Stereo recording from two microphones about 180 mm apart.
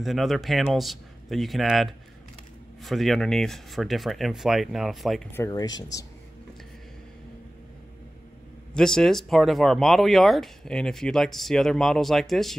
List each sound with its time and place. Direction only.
0.0 s speech: centre (ahead or behind)
5.3 s speech: 15° left (ahead or behind)
8.7 s speech: 5° left (ahead or behind)